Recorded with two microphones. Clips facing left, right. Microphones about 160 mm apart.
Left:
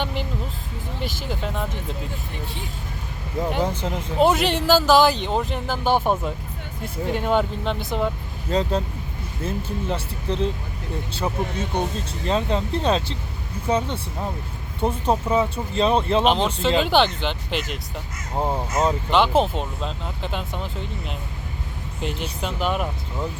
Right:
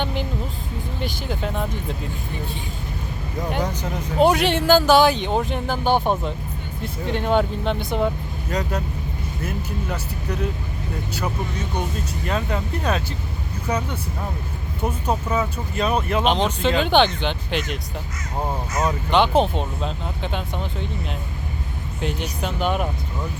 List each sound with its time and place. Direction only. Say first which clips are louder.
0.0 s vehicle: right 1 dB; centre (ahead or behind)
1.0 s speech: right 1 dB; centre (ahead or behind)
3.6 s speech: left 2 dB; 25° left (ahead or behind)
4.2 s speech: right 1 dB; centre (ahead or behind)
8.4 s speech: left 3 dB; 25° left (ahead or behind)
16.2 s speech: even; centre (ahead or behind)
18.3 s speech: left 2 dB; 20° left (ahead or behind)
19.1 s speech: right 2 dB; centre (ahead or behind)
22.0 s speech: right 1 dB; centre (ahead or behind)